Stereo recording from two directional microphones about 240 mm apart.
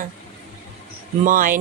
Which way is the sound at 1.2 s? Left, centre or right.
Right.